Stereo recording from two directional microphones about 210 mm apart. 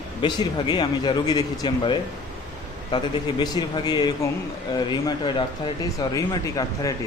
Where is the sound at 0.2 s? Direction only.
20° left (ahead or behind).